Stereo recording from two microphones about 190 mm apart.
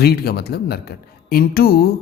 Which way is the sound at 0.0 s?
55° left (ahead or behind).